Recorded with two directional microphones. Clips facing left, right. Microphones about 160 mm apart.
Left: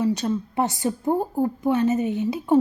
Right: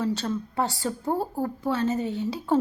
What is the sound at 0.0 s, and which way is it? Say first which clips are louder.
Speech: left 4 dB; 15° left (ahead or behind).